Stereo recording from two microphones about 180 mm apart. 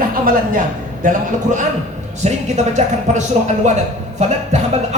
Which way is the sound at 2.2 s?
40° right (ahead or behind).